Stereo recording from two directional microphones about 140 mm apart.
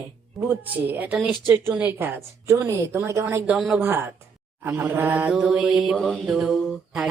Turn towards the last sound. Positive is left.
turn(degrees=0)  # may be behind; listen again after turning